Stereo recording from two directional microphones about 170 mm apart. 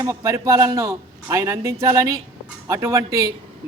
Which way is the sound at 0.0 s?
20° right (ahead or behind).